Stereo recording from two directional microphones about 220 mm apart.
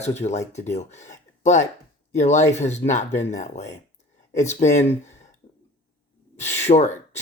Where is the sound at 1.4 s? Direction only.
35° left (ahead or behind).